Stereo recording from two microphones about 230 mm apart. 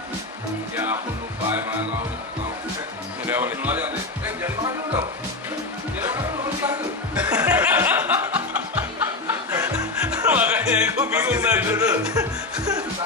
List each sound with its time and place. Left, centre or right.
0.7 s music: centre
3.3 s music: centre
12.1 s chuckle: centre